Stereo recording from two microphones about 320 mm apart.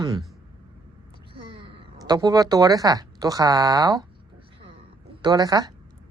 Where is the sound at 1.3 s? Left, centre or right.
Centre.